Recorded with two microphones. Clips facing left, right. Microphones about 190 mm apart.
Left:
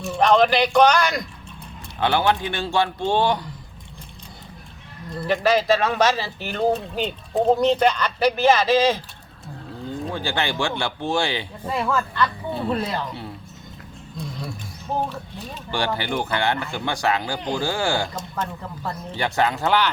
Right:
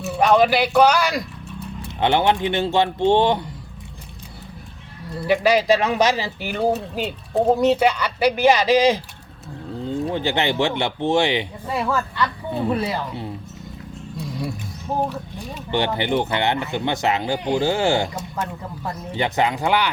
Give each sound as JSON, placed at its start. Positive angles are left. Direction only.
{"t": 0.0, "sound": "a man's voice", "side_deg": -5}
{"t": 2.0, "sound": "speech", "side_deg": -20}
{"t": 5.2, "sound": "speech", "side_deg": -10}
{"t": 10.1, "sound": "speech", "side_deg": -20}
{"t": 11.7, "sound": "a woman's voice", "side_deg": -5}
{"t": 14.2, "sound": "a sound", "side_deg": -10}
{"t": 15.1, "sound": "speech", "side_deg": -15}
{"t": 18.1, "sound": "speech", "side_deg": -10}